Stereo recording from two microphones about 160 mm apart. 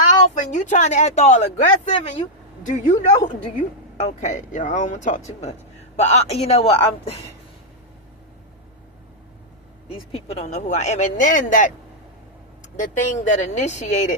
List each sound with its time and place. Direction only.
0.3 s speech: 50° left (ahead or behind)
2.6 s speech: 50° left (ahead or behind)
9.9 s speech: 40° left (ahead or behind)
12.8 s speech: 50° left (ahead or behind)